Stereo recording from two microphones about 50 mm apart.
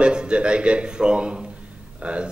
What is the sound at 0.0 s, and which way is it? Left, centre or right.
A man's voice, centre.